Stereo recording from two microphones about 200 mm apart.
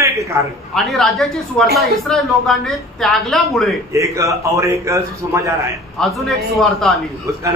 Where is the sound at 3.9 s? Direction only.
15° right (ahead or behind).